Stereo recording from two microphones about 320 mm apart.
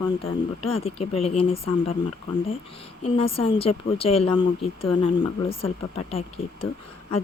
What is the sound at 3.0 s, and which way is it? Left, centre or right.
Speech, centre.